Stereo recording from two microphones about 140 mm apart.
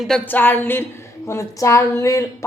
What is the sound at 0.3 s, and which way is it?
A woman's voice, 15° left (ahead or behind).